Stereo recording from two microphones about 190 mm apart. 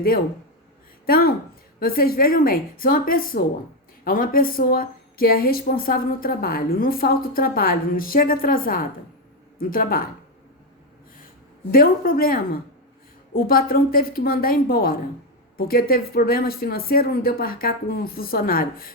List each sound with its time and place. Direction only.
1.0 s a woman's voice: 50° left (ahead or behind)
11.7 s a woman's voice: 50° left (ahead or behind)